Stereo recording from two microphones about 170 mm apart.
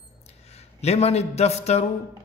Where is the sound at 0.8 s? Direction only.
40° left (ahead or behind).